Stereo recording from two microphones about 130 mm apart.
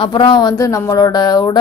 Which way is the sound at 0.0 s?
40° left (ahead or behind).